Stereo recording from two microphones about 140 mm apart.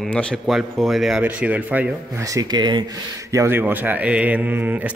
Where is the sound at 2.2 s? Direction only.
25° right (ahead or behind).